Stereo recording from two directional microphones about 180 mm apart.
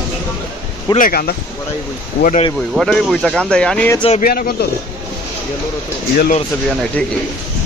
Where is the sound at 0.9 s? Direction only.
55° left (ahead or behind).